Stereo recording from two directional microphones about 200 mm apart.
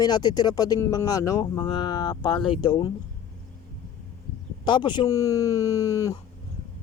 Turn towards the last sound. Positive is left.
turn(degrees=15)  # may be behind; listen again after turning